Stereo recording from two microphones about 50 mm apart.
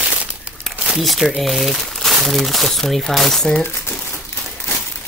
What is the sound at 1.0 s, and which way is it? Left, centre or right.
Speech, centre.